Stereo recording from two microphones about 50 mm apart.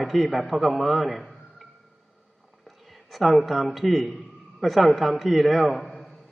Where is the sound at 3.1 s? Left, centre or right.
Centre.